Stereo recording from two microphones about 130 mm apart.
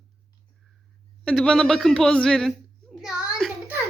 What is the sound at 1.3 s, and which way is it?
A woman's voice, 5° left (ahead or behind).